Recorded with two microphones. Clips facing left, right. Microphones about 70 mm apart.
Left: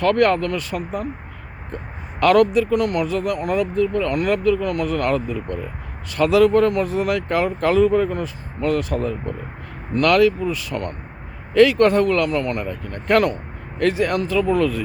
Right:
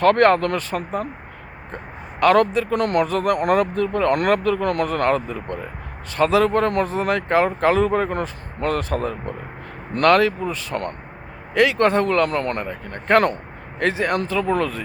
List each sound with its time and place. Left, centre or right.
0.0 s speech: right
2.2 s speech: right
2.6 s speech: right
7.9 s speech: right
11.5 s speech: right